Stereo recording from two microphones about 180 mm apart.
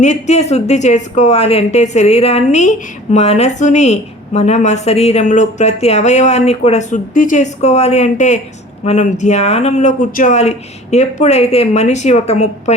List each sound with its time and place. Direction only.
0.0 s a woman's voice: 40° left (ahead or behind)